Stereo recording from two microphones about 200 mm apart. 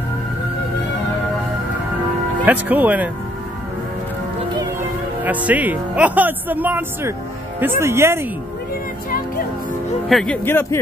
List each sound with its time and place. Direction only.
2.4 s speech: 10° right (ahead or behind)
5.2 s speech: 10° right (ahead or behind)
10.0 s speech: 5° left (ahead or behind)